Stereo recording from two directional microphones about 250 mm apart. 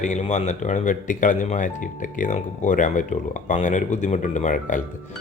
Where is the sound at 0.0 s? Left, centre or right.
Left.